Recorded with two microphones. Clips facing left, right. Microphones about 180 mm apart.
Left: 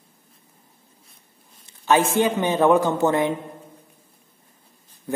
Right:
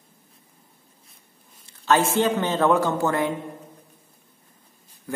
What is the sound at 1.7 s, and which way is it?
A man's voice, 15° left (ahead or behind).